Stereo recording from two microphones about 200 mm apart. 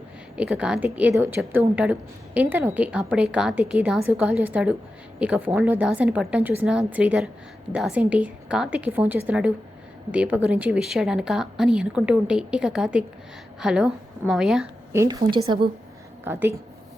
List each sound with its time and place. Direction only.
0.3 s a woman's voice: 5° right (ahead or behind)
14.9 s a woman's voice: 20° right (ahead or behind)
16.2 s a woman's voice: 10° right (ahead or behind)